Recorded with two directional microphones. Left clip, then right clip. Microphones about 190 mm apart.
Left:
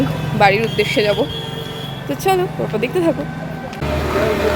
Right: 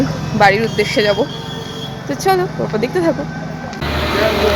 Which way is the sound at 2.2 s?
5° left (ahead or behind).